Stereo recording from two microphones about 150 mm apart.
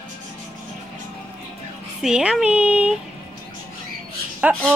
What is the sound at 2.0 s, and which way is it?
Speech, 5° right (ahead or behind).